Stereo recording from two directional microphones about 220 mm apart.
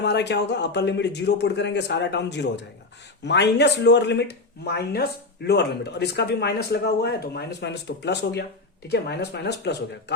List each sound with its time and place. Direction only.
0.0 s speech: 50° left (ahead or behind)